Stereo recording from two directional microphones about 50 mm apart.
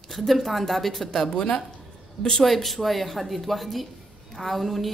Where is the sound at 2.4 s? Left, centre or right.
Centre.